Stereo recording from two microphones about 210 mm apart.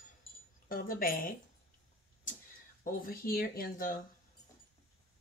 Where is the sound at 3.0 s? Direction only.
45° left (ahead or behind).